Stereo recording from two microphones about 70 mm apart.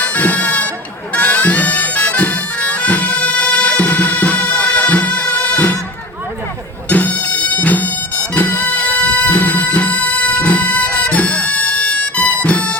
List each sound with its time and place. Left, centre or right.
0.0 s music: left
1.1 s bagpipes: left
6.9 s music: centre